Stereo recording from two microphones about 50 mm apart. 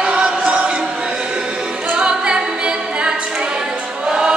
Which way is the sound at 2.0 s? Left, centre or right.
Right.